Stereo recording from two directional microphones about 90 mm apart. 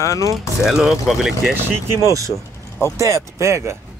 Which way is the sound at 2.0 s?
40° right (ahead or behind).